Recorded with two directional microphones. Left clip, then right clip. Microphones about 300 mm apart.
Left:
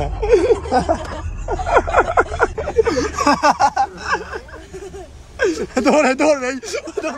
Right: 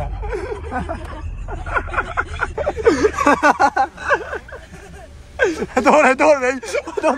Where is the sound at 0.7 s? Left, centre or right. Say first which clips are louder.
Left 9 dB; left.